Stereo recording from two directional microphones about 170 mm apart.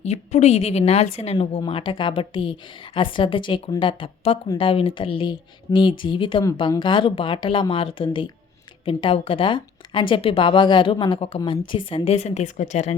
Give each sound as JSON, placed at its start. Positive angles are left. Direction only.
{"t": 0.0, "sound": "a woman's voice", "side_deg": 40}